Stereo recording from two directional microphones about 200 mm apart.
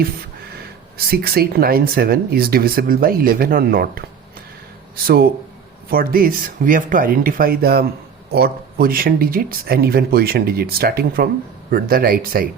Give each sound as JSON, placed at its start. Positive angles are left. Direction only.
{"t": 0.9, "sound": "speech", "side_deg": -50}
{"t": 5.0, "sound": "speech", "side_deg": -50}